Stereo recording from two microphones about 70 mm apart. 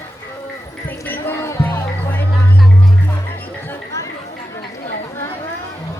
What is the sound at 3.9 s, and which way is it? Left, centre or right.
Chatter, left.